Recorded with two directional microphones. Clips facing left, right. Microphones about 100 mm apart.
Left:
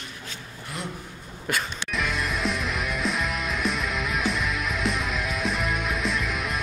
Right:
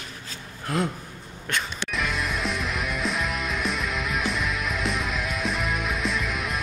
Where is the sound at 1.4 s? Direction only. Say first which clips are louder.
Left 1 dB; centre (ahead or behind).